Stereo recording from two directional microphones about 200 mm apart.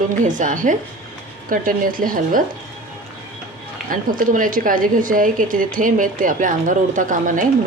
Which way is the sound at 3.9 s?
45° right (ahead or behind).